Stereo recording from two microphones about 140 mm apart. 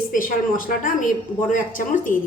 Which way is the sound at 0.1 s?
75° left (ahead or behind).